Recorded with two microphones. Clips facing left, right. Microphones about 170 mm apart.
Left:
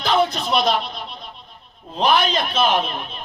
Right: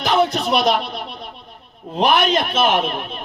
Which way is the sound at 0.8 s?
65° right (ahead or behind).